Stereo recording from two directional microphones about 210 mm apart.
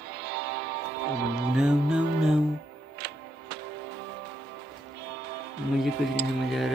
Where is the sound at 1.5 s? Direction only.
5° right (ahead or behind).